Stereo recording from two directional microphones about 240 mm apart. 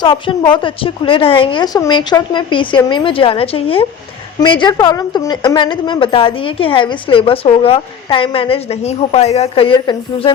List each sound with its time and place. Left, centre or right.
0.0 s a woman's voice: centre